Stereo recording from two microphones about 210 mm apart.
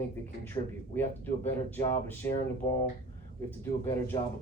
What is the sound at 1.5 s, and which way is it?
Speech, 10° left (ahead or behind).